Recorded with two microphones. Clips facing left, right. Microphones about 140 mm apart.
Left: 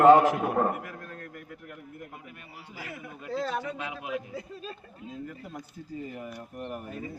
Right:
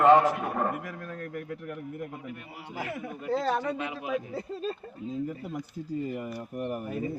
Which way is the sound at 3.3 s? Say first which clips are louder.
Right 4 dB; 55° right (ahead or behind).